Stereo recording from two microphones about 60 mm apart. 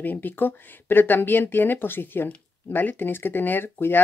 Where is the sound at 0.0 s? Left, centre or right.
Left.